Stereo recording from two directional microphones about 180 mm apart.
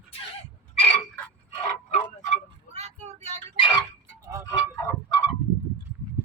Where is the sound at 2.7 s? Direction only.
35° right (ahead or behind).